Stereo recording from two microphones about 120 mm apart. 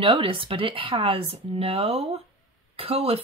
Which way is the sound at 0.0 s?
45° right (ahead or behind).